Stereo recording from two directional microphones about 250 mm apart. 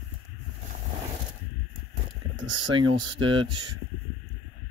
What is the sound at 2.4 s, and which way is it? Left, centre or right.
Speech, right.